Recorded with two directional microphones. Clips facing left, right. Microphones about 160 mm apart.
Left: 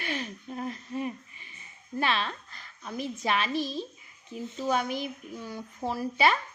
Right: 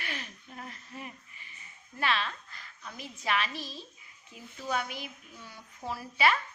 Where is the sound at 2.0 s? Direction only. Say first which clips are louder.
Left 3 dB; 25° left (ahead or behind).